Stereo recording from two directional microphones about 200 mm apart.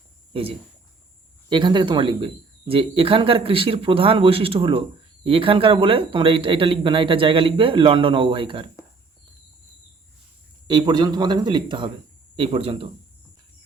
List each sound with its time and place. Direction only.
1.5 s speech: 25° right (ahead or behind)
10.7 s speech: 20° right (ahead or behind)